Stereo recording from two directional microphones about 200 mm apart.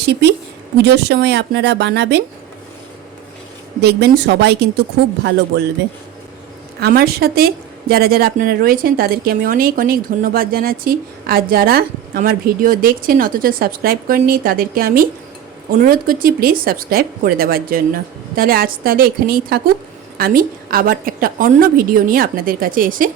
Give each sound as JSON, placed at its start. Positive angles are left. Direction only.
{"t": 0.8, "sound": "speech", "side_deg": -55}
{"t": 3.8, "sound": "speech", "side_deg": -55}
{"t": 6.7, "sound": "a woman's voice", "side_deg": -50}